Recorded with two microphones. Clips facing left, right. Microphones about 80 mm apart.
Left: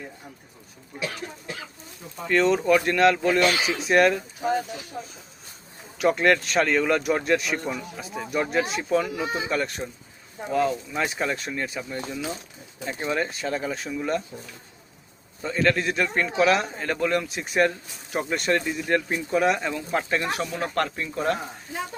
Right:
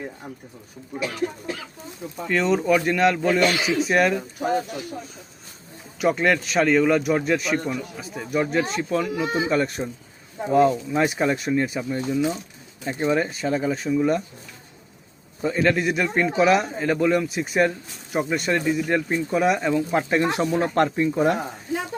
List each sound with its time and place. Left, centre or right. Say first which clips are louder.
2.2 s a man's voice: even; centre
6.0 s a man's voice: even; centre
10.5 s a man's voice: right 6 dB; right
15.4 s a man's voice: right 2 dB; centre